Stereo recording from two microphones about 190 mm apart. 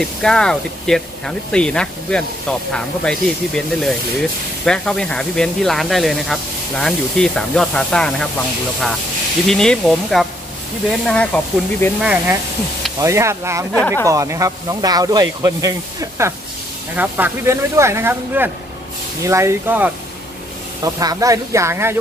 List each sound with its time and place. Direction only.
0.0 s speech: 5° left (ahead or behind)
9.5 s speech: 5° left (ahead or behind)
13.0 s speech: 15° right (ahead or behind)
13.7 s speech: 5° left (ahead or behind)
14.0 s speech: 15° right (ahead or behind)